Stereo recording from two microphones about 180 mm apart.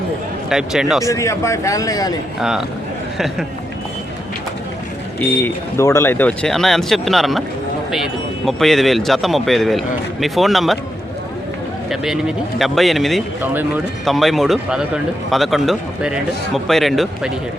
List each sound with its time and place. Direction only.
0.5 s speech: 5° right (ahead or behind)
1.0 s speech: 15° left (ahead or behind)
2.4 s speech: 5° right (ahead or behind)
5.2 s speech: 15° left (ahead or behind)
11.9 s speech: centre (ahead or behind)